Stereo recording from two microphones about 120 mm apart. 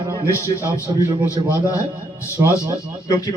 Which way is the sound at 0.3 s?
25° left (ahead or behind).